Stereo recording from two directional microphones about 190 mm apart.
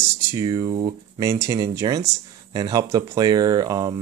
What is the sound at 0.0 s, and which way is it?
Speech, 15° right (ahead or behind).